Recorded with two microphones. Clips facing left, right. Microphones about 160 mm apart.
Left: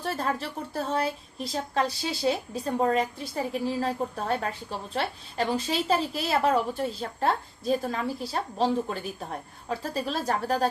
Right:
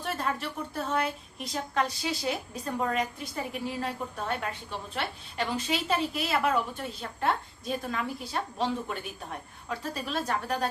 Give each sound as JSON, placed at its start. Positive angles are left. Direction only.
{"t": 0.0, "sound": "a woman's voice", "side_deg": 35}